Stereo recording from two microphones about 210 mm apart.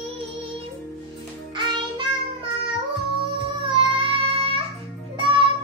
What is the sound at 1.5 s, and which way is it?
Music, 20° right (ahead or behind).